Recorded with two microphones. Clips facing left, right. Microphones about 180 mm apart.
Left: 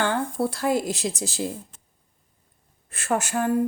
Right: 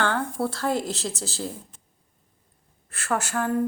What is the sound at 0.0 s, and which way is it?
A woman's voice, 15° left (ahead or behind).